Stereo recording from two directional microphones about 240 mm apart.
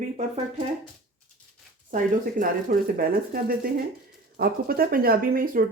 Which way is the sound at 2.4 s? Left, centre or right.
Right.